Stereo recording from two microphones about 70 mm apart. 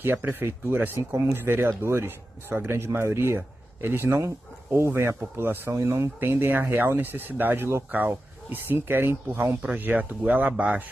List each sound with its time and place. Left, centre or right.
0.0 s speech: right
5.7 s speech: right
6.1 s speech: right